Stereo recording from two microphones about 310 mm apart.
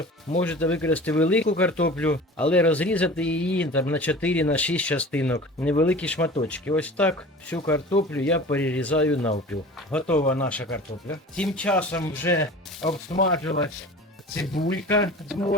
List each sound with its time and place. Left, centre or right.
0.4 s speech: centre
12.9 s speech: left
14.5 s speech: centre